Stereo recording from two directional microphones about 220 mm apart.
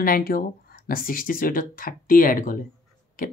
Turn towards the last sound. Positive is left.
turn(degrees=40)  # may be behind; listen again after turning